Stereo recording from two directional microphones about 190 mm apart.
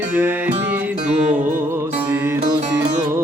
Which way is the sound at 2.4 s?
35° right (ahead or behind).